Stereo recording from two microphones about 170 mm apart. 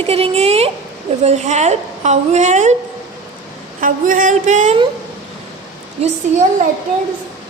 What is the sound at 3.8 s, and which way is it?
A woman's voice, 50° right (ahead or behind).